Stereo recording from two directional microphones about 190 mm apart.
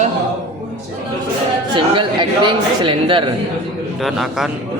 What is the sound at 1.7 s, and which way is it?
Speech, 25° right (ahead or behind).